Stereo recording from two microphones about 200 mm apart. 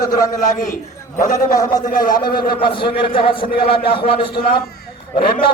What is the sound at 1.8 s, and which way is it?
Speech, 45° left (ahead or behind).